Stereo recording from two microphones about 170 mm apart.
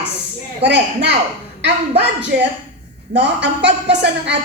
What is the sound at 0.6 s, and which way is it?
Speech, 90° right.